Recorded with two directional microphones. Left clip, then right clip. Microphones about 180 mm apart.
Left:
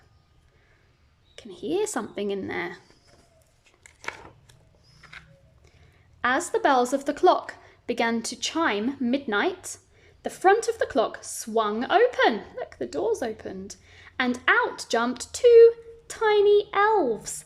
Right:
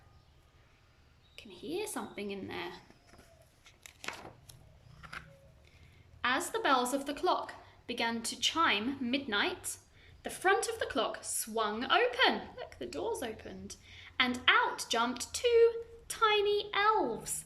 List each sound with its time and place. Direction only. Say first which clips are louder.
1.4 s a woman's voice: left 12 dB; 45° left (ahead or behind)
3.8 s a sound: left 6 dB; 5° right (ahead or behind)
6.2 s a woman's voice: left 8 dB; 40° left (ahead or behind)